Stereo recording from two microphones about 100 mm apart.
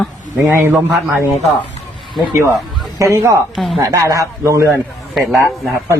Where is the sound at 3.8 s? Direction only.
30° right (ahead or behind).